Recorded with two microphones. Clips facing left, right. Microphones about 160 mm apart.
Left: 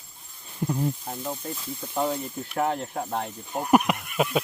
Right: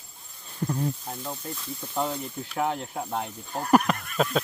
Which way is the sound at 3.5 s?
10° left (ahead or behind).